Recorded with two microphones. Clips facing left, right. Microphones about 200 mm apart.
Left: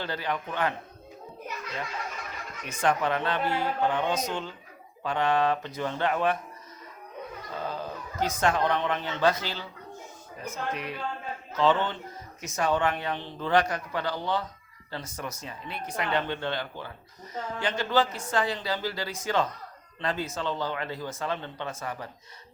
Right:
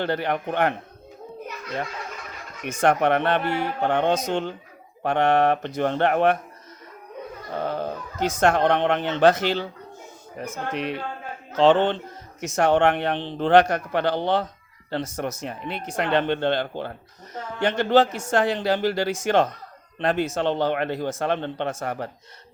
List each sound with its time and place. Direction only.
0.0 s speech: 60° right (ahead or behind)
2.8 s speech: 65° right (ahead or behind)
7.5 s dog: 65° right (ahead or behind)
8.4 s speech: 70° right (ahead or behind)
12.4 s speech: 70° right (ahead or behind)